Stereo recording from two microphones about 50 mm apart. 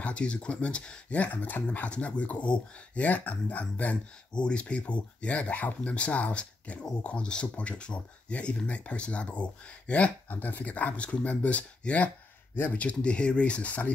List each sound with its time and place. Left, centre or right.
0.0 s speech: left
4.3 s speech: centre